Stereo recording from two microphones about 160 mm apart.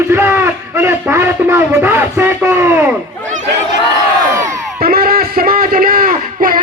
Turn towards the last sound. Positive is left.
turn(degrees=-60)  # may be behind; listen again after turning